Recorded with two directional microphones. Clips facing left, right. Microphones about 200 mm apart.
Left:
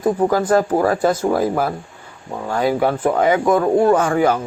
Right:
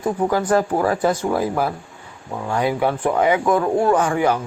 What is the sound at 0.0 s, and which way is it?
Speech, 40° left (ahead or behind).